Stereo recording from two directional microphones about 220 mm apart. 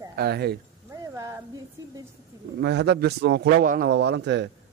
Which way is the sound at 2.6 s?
50° right (ahead or behind).